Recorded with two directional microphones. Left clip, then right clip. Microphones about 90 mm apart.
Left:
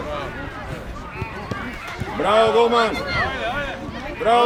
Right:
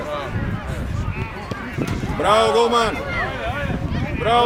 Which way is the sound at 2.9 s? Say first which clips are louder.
Left 1 dB; 35° left (ahead or behind).